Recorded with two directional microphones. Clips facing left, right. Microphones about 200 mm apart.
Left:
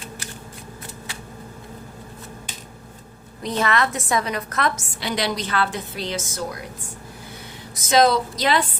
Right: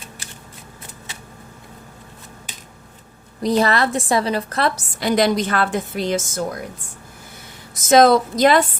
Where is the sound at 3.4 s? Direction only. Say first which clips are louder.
Right 5 dB; 35° right (ahead or behind).